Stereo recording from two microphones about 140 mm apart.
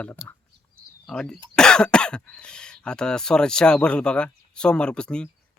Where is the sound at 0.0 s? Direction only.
15° left (ahead or behind).